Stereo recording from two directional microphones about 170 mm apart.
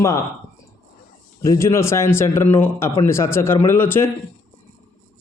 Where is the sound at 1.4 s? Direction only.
15° left (ahead or behind).